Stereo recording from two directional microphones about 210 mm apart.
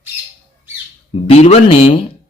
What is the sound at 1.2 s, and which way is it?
Speech, 30° left (ahead or behind).